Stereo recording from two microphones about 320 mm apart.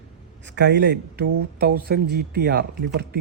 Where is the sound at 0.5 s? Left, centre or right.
Right.